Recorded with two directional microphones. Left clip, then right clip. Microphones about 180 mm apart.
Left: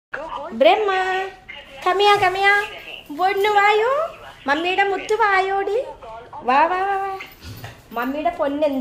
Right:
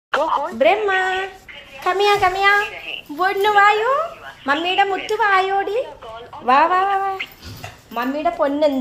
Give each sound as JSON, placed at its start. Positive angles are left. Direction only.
{"t": 0.1, "sound": "speech", "side_deg": -40}
{"t": 0.6, "sound": "a child's voice", "side_deg": 20}
{"t": 6.4, "sound": "speech", "side_deg": 0}